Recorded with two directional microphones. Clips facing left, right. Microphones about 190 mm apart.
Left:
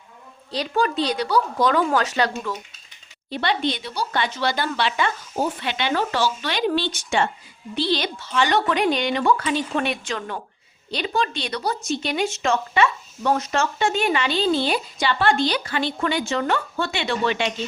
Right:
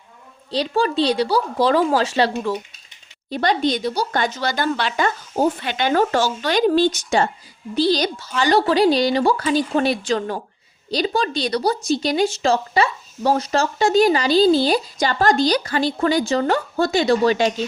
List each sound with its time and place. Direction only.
0.5 s speech: 30° right (ahead or behind)
3.2 s speech: 45° right (ahead or behind)